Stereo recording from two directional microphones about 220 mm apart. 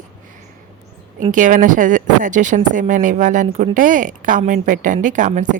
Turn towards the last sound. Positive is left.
turn(degrees=-35)  # may be behind; listen again after turning